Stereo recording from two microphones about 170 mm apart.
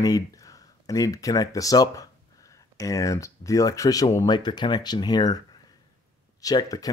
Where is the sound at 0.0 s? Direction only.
20° left (ahead or behind).